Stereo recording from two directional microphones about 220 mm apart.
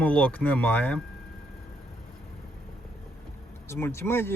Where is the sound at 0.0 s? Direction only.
5° left (ahead or behind).